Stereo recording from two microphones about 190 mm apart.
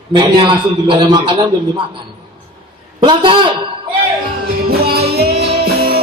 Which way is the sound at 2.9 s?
25° right (ahead or behind).